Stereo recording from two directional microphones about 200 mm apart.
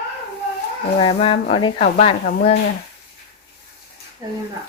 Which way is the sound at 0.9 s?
25° left (ahead or behind).